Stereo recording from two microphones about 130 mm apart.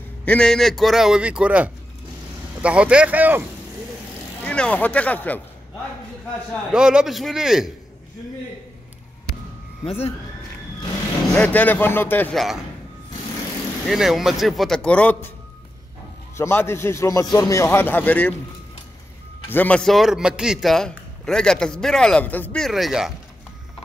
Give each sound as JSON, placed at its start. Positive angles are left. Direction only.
{"t": 0.2, "sound": "a man's voice", "side_deg": 5}
{"t": 4.5, "sound": "speech", "side_deg": 10}
{"t": 6.7, "sound": "a man's voice", "side_deg": -5}
{"t": 9.8, "sound": "speech", "side_deg": 50}
{"t": 11.3, "sound": "speech", "side_deg": 10}
{"t": 13.8, "sound": "a man's voice", "side_deg": 0}
{"t": 16.3, "sound": "a man's voice", "side_deg": 20}
{"t": 19.5, "sound": "a man's voice", "side_deg": 10}